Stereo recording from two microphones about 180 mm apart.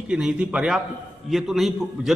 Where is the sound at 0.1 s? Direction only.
5° right (ahead or behind).